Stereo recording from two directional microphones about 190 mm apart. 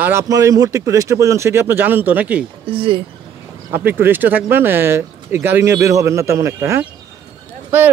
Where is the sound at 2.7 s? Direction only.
30° right (ahead or behind).